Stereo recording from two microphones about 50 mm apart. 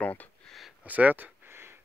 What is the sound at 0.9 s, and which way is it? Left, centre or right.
Speech, right.